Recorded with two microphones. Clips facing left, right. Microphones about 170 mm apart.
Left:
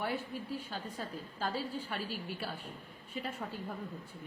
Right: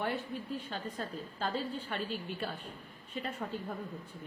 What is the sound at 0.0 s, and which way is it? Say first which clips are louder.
A woman's voice: right 1 dB; 5° left (ahead or behind).